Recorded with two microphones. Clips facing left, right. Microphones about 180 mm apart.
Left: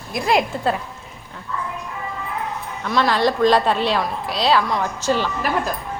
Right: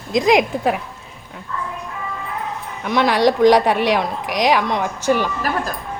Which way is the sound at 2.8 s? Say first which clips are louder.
Right 3 dB; 15° right (ahead or behind).